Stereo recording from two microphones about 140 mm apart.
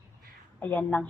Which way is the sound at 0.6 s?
15° left (ahead or behind).